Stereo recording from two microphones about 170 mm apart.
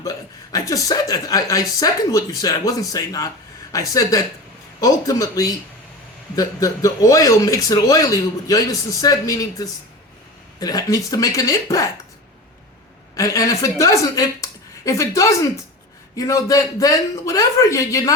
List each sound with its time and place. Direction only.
0.0 s speech: 20° left (ahead or behind)
13.1 s a woman's voice: 20° left (ahead or behind)